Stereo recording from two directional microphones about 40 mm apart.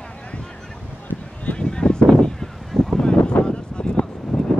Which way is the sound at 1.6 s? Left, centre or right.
Left.